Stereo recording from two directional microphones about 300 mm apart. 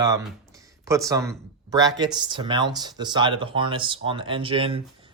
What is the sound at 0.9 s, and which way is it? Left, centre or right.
Speech, centre.